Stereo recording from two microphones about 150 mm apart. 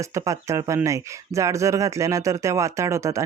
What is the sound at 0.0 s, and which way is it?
Speech, 20° right (ahead or behind).